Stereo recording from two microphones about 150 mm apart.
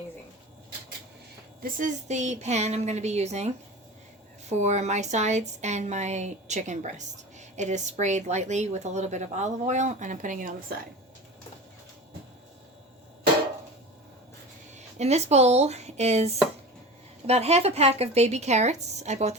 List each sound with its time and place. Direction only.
1.6 s a woman's voice: 60° right (ahead or behind)
14.8 s a woman's voice: 50° right (ahead or behind)